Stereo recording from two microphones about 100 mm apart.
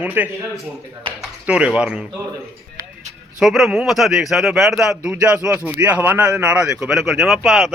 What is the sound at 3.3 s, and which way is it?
Speech, centre (ahead or behind).